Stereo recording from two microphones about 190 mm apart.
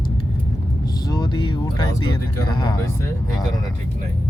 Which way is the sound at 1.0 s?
20° left (ahead or behind).